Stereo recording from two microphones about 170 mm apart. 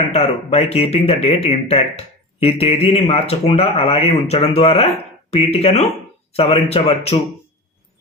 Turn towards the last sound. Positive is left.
turn(degrees=35)  # may be behind; listen again after turning